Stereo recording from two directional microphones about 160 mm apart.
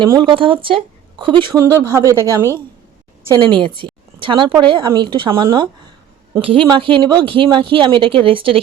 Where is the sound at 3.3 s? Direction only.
30° right (ahead or behind).